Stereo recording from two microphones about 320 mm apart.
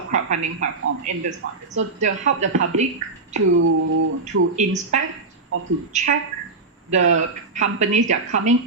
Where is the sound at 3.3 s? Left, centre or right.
Right.